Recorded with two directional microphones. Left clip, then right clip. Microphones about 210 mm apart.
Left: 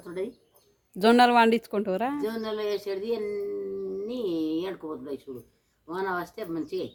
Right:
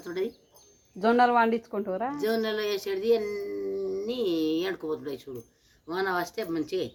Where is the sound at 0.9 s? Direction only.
40° left (ahead or behind).